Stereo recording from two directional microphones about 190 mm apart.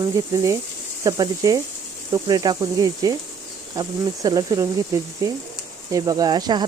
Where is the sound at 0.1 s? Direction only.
15° right (ahead or behind).